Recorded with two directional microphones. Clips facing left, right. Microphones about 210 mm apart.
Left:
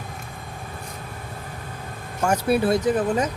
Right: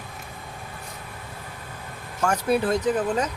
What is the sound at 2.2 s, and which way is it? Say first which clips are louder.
Speech: left 2 dB; 10° left (ahead or behind).